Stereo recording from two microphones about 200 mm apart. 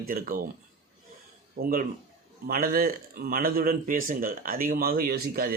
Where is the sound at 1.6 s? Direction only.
45° right (ahead or behind).